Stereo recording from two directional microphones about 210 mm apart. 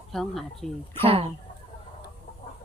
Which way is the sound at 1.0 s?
25° right (ahead or behind).